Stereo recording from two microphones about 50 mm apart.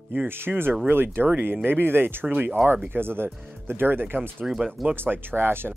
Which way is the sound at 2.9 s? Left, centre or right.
Right.